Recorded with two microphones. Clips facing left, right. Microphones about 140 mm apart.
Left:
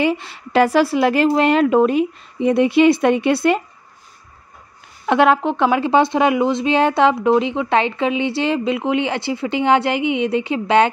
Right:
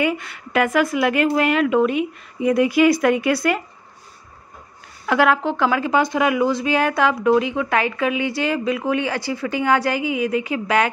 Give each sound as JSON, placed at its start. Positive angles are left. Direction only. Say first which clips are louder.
{"t": 0.0, "sound": "speech", "louder": "left 3 dB", "side_deg": 25}
{"t": 5.0, "sound": "speech", "louder": "left 3 dB", "side_deg": 25}